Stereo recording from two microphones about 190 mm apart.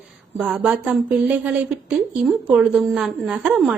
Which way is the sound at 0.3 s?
Centre (ahead or behind).